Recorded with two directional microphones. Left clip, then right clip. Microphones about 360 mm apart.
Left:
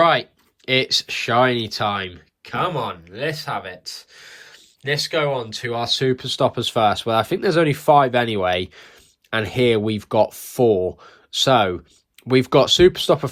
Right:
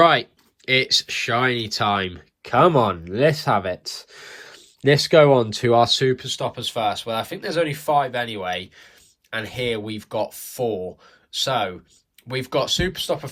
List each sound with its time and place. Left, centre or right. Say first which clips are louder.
0.0 s speech: right 1 dB; centre